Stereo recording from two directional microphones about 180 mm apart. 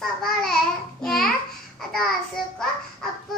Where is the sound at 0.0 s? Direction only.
5° left (ahead or behind).